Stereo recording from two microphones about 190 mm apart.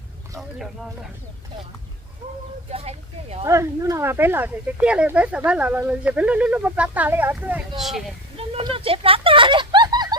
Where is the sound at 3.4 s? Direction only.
15° right (ahead or behind); by 8.1 s centre (ahead or behind).